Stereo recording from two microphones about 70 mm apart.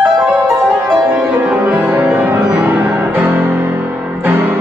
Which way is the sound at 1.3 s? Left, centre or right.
Centre.